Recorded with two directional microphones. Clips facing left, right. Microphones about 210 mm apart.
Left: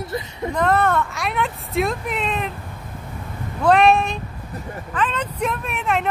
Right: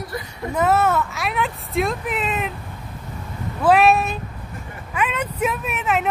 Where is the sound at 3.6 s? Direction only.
5° right (ahead or behind).